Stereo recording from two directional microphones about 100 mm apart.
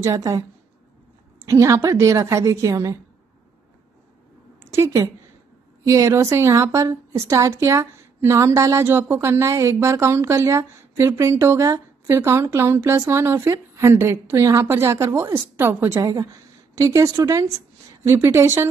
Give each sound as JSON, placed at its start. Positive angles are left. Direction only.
{"t": 0.0, "sound": "a woman's voice", "side_deg": -30}
{"t": 1.5, "sound": "a woman's voice", "side_deg": -30}
{"t": 4.7, "sound": "a woman's voice", "side_deg": -30}
{"t": 16.0, "sound": "a woman's voice", "side_deg": -35}
{"t": 18.0, "sound": "a woman's voice", "side_deg": -25}